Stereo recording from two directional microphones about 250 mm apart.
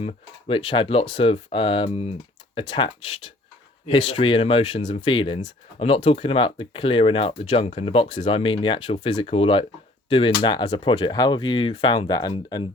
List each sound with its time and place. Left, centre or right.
0.0 s speech: left